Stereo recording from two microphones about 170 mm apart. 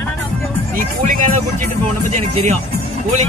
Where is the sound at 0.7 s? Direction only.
55° right (ahead or behind).